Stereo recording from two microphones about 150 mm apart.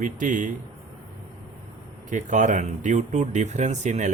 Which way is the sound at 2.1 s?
55° right (ahead or behind).